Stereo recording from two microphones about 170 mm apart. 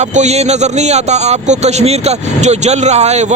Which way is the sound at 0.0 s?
45° right (ahead or behind).